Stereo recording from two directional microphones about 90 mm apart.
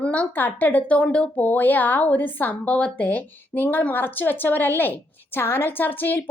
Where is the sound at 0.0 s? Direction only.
15° left (ahead or behind).